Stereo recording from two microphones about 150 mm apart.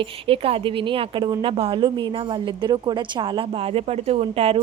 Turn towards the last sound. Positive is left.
turn(degrees=-40)  # may be behind; listen again after turning